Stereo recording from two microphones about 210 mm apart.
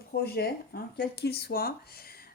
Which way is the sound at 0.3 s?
50° left (ahead or behind).